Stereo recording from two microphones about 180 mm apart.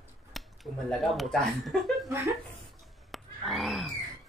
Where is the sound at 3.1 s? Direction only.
Centre (ahead or behind).